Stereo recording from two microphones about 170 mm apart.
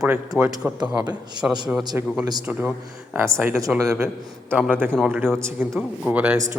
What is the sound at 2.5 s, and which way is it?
Speech, 10° right (ahead or behind).